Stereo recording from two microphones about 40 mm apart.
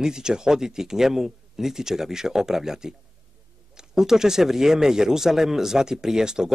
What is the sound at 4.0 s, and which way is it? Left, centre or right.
Speech, centre.